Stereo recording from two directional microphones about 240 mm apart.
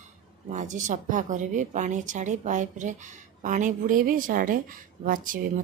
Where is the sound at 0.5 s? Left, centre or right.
Right.